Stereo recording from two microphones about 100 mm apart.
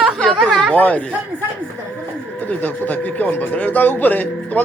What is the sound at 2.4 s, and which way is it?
Speech, 15° left (ahead or behind).